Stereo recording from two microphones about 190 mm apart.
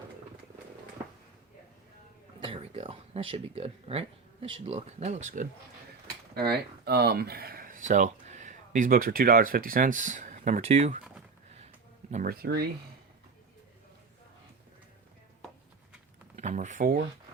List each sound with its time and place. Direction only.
2.4 s speech: 30° right (ahead or behind)
6.3 s speech: 55° right (ahead or behind); by 11.0 s 35° right (ahead or behind)
12.1 s speech: 50° right (ahead or behind)
16.3 s speech: 40° right (ahead or behind)